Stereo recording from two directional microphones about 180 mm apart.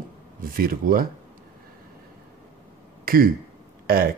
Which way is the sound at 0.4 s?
55° right (ahead or behind).